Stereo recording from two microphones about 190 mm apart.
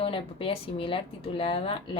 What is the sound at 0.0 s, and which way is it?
A woman's voice, 30° left (ahead or behind).